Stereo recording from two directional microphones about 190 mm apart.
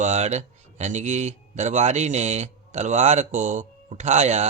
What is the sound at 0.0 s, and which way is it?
Speech, 35° right (ahead or behind).